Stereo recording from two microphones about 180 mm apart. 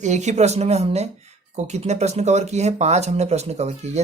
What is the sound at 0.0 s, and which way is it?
Speech, 40° right (ahead or behind).